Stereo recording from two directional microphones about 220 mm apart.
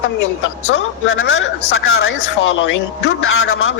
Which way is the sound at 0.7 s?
65° left (ahead or behind).